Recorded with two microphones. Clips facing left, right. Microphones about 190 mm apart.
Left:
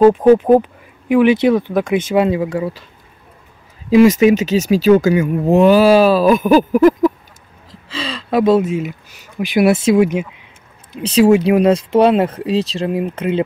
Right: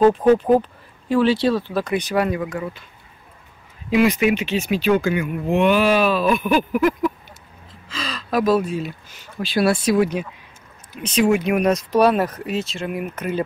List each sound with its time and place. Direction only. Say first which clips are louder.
0.0 s speech: left 5 dB; 10° left (ahead or behind); by 2.8 s 30° left (ahead or behind)
3.9 s speech: left 8 dB; 40° left (ahead or behind)
7.9 s speech: left 5 dB; 30° left (ahead or behind)
11.0 s speech: left 7 dB; 35° left (ahead or behind)